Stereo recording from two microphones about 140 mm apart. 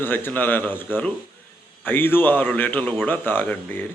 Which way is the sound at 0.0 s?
15° left (ahead or behind).